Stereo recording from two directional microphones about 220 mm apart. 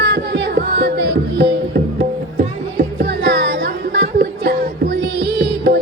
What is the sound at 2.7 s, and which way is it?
Music, 45° right (ahead or behind).